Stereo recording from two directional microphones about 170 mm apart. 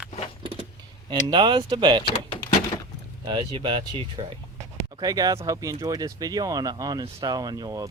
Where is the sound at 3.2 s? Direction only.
30° right (ahead or behind).